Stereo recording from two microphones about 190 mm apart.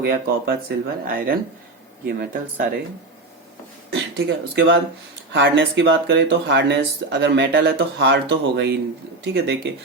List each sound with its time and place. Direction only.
0.0 s speech: 55° right (ahead or behind)
3.9 s speech: 75° right (ahead or behind)